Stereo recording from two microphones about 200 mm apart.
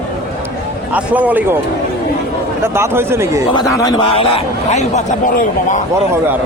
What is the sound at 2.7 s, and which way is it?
Speech, 10° right (ahead or behind).